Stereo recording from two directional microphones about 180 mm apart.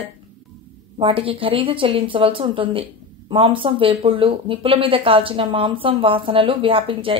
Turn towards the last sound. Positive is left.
turn(degrees=-30)  # may be behind; listen again after turning